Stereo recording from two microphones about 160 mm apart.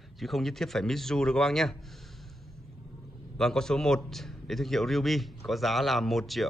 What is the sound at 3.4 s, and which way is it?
A man's voice, 5° left (ahead or behind).